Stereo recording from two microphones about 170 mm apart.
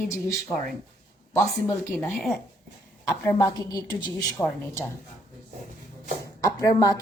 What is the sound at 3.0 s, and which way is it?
A woman's voice, 20° left (ahead or behind).